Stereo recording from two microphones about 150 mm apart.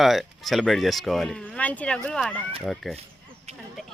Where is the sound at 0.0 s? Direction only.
Centre (ahead or behind).